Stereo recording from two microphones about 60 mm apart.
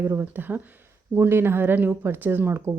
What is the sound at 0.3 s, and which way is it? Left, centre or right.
Speech, right.